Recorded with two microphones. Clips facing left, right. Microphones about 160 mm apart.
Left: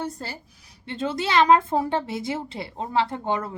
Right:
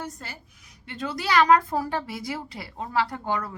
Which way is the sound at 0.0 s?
30° left (ahead or behind).